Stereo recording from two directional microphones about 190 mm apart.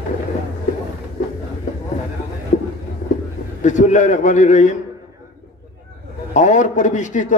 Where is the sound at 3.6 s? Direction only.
40° left (ahead or behind).